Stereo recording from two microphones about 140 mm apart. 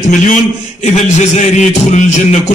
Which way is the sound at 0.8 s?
55° left (ahead or behind).